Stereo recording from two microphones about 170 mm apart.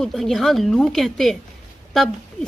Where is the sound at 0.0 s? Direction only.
Centre (ahead or behind).